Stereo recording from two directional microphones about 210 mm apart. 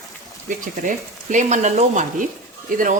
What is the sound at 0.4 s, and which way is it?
Speech, 40° right (ahead or behind).